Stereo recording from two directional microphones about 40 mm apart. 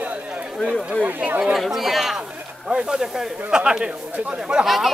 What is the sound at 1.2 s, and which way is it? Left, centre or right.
Speech, centre.